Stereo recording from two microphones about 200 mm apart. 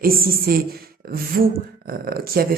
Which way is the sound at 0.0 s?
45° right (ahead or behind).